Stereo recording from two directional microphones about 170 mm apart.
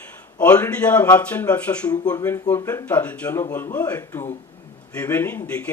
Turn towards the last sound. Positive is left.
turn(degrees=5)  # may be behind; listen again after turning